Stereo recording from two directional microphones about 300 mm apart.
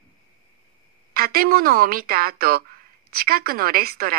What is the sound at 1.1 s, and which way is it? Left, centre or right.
A woman's voice, right.